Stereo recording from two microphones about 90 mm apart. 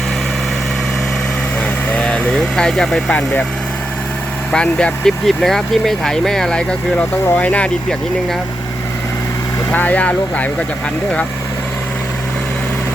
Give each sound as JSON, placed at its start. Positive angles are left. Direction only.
{"t": 1.6, "sound": "vehicle", "side_deg": 10}
{"t": 4.5, "sound": "speech", "side_deg": 10}
{"t": 9.7, "sound": "speech", "side_deg": 15}